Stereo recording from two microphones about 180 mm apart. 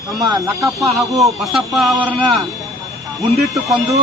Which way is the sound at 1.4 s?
Centre (ahead or behind).